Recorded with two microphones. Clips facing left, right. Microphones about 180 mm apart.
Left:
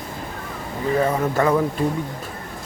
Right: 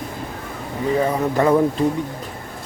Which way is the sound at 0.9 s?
10° right (ahead or behind).